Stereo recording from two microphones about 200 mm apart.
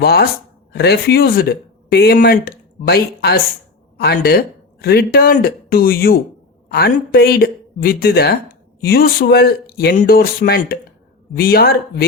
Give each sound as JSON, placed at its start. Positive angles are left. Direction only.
{"t": 0.0, "sound": "speech", "side_deg": 50}